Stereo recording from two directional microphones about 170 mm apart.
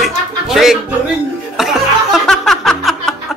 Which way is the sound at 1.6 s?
Centre (ahead or behind).